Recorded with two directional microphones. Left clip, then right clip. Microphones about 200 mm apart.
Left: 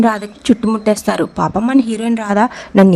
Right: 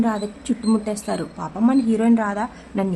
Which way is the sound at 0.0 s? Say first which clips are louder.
Left 9 dB; 45° left (ahead or behind).